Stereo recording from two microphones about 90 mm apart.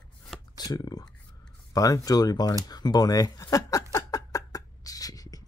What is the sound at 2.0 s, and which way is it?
Speech, 45° left (ahead or behind).